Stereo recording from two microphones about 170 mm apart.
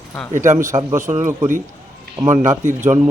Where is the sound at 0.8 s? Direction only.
20° right (ahead or behind).